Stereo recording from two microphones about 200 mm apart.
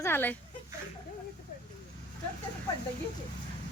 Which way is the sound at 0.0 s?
10° left (ahead or behind).